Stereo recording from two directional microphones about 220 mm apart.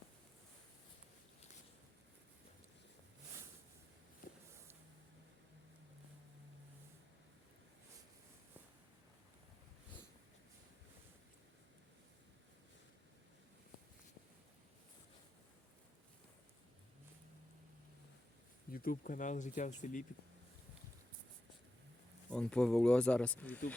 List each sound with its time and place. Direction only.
4.2 s a sound: 40° left (ahead or behind)
18.7 s speech: 40° left (ahead or behind)
22.3 s speech: 5° left (ahead or behind)